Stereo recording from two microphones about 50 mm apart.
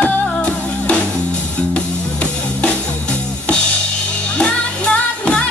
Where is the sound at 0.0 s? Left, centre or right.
Left.